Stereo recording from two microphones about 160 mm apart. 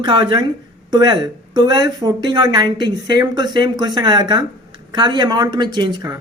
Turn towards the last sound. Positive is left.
turn(degrees=-25)  # may be behind; listen again after turning